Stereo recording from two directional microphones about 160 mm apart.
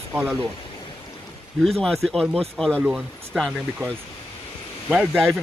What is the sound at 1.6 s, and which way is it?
Speech, centre (ahead or behind).